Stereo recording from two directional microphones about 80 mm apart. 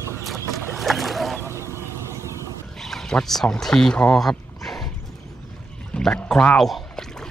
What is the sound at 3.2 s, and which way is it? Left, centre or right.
Speech, centre.